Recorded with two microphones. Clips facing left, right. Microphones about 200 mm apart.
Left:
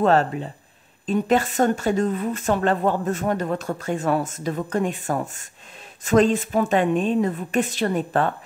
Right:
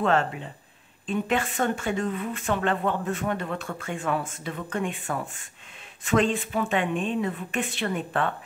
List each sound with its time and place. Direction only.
0.0 s speech: 40° left (ahead or behind)